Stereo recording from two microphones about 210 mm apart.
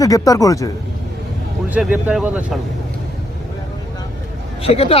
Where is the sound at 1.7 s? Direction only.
5° right (ahead or behind).